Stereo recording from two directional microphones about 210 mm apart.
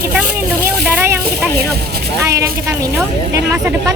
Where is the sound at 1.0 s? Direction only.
10° right (ahead or behind).